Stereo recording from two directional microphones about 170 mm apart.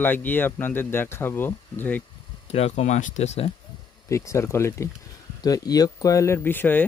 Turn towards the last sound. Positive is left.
turn(degrees=10)  # may be behind; listen again after turning